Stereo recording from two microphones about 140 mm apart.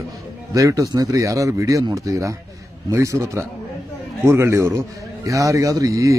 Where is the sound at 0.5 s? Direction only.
25° right (ahead or behind).